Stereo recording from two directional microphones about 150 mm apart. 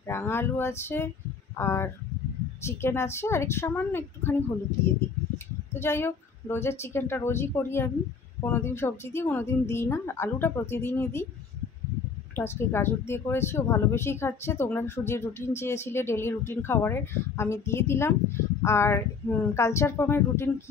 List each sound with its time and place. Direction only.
0.0 s speech: 15° left (ahead or behind)
5.7 s speech: 15° left (ahead or behind)
12.4 s speech: 15° left (ahead or behind)